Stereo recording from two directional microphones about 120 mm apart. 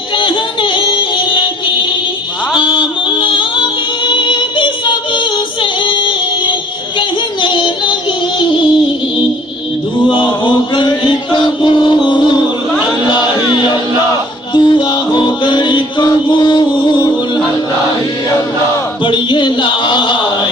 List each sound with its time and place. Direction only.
0.2 s music: 45° left (ahead or behind)
2.6 s music: 45° left (ahead or behind)
4.0 s yodeling: 40° left (ahead or behind)
5.8 s female singing: 45° left (ahead or behind)
7.4 s child singing: 40° left (ahead or behind)
10.1 s chant: 45° left (ahead or behind)
14.1 s music: 40° left (ahead or behind)
19.0 s a sound: 40° left (ahead or behind)